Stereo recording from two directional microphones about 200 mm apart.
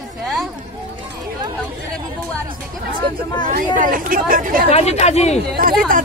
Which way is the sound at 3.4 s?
45° right (ahead or behind).